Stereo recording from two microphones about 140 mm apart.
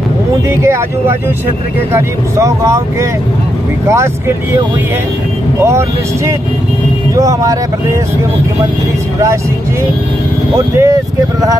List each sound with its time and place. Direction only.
0.5 s speech: 15° right (ahead or behind)
5.6 s speech: 20° right (ahead or behind)
7.2 s speech: 25° right (ahead or behind)
10.5 s speech: 20° right (ahead or behind)